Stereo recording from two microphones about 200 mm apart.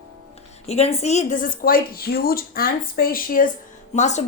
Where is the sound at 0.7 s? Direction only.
30° left (ahead or behind).